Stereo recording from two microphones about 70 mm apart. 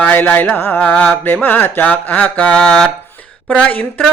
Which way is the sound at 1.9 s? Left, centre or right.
Centre.